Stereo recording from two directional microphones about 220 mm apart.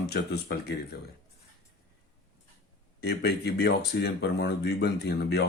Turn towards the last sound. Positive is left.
turn(degrees=50)  # may be behind; listen again after turning